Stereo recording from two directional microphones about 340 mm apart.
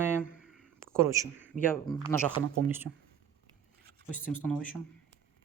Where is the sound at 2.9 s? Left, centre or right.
Right.